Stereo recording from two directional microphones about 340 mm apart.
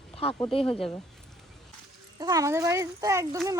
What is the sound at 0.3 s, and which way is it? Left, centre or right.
Speech, centre.